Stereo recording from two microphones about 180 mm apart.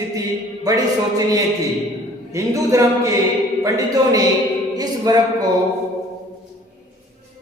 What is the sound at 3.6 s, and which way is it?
Speech, 20° right (ahead or behind).